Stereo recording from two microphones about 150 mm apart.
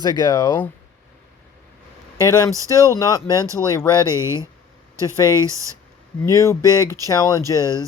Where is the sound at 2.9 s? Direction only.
25° left (ahead or behind).